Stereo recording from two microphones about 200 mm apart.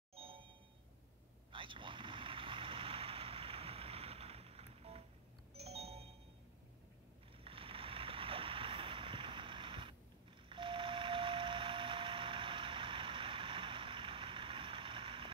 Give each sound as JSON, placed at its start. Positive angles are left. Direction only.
{"t": 0.1, "sound": "ding", "side_deg": -25}
{"t": 1.5, "sound": "vehicle", "side_deg": -25}
{"t": 5.6, "sound": "music", "side_deg": -30}
{"t": 7.4, "sound": "a sound", "side_deg": -25}
{"t": 10.5, "sound": "vehicle", "side_deg": -25}